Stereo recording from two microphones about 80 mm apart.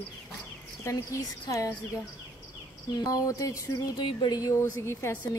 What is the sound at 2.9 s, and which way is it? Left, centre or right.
Speech, left.